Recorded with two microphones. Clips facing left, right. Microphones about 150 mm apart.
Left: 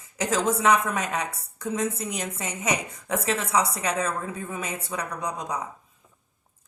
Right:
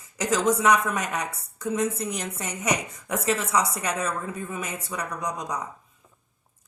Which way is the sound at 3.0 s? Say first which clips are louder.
Right 1 dB; 30° left (ahead or behind).